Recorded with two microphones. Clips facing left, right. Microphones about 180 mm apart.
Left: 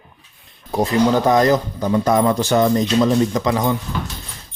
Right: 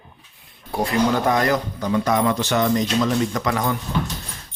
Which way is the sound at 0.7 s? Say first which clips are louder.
Left 4 dB; 20° left (ahead or behind).